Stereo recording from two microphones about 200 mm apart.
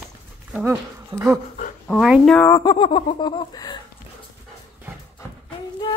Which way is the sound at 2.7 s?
25° left (ahead or behind).